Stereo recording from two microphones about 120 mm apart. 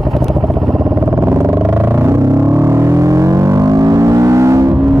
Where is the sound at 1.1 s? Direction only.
25° right (ahead or behind).